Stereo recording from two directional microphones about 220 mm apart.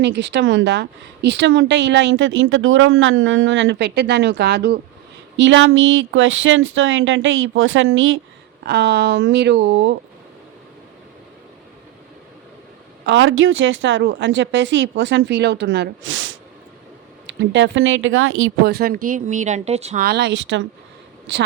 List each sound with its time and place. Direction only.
0.0 s a woman's voice: 50° right (ahead or behind)
8.6 s a woman's voice: 50° right (ahead or behind)
13.1 s a woman's voice: 60° right (ahead or behind); by 20.1 s 30° right (ahead or behind)
20.1 s a woman's voice: 50° right (ahead or behind)